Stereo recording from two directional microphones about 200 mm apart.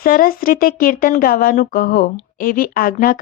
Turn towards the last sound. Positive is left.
turn(degrees=45)  # may be behind; listen again after turning